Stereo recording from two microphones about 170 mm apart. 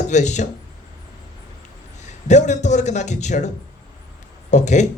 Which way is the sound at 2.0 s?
45° left (ahead or behind).